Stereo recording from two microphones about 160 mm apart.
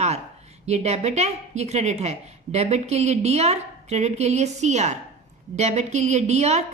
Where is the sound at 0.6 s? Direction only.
45° right (ahead or behind).